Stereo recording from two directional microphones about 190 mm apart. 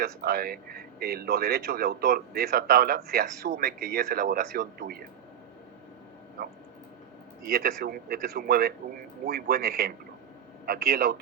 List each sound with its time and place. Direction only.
0.0 s a man's voice: 55° right (ahead or behind)
7.5 s a man's voice: 55° right (ahead or behind)